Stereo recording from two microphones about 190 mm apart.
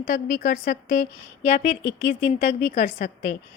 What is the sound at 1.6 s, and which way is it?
Speech, 65° left (ahead or behind).